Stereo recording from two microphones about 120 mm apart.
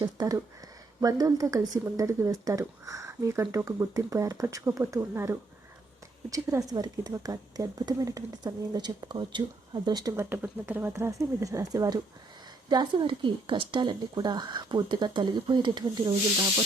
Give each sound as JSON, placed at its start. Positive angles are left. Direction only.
{"t": 0.0, "sound": "a woman's voice", "side_deg": -35}
{"t": 10.2, "sound": "a woman's voice", "side_deg": -15}